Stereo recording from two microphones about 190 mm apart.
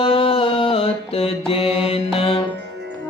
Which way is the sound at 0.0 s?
30° left (ahead or behind).